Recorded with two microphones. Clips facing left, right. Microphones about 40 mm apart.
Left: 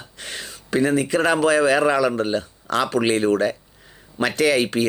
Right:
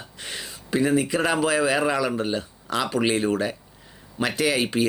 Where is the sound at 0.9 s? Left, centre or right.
Centre.